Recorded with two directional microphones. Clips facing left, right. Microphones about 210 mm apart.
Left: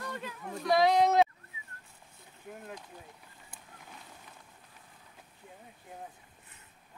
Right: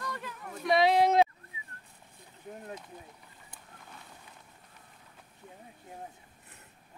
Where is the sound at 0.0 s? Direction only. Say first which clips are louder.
Left 1 dB; 20° left (ahead or behind).